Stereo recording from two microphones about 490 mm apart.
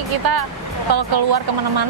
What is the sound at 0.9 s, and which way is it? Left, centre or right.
Speech, right.